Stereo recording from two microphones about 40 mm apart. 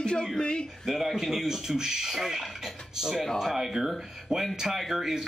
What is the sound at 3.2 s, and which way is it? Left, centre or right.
Speech, centre.